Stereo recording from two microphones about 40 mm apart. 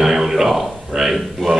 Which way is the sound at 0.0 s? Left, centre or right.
Centre.